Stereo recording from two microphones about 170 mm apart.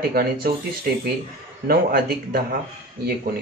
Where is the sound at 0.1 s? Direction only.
60° right (ahead or behind).